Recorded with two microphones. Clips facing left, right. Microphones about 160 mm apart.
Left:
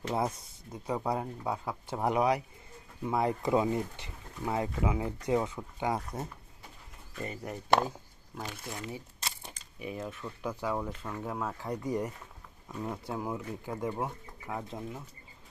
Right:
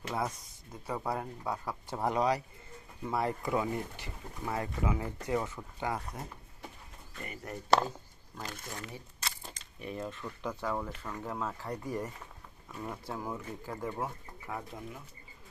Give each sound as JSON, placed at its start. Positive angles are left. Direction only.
{"t": 0.1, "sound": "speech", "side_deg": 25}
{"t": 0.9, "sound": "speech", "side_deg": 15}
{"t": 7.3, "sound": "speech", "side_deg": 15}
{"t": 8.8, "sound": "speech", "side_deg": 20}
{"t": 9.5, "sound": "speech", "side_deg": 5}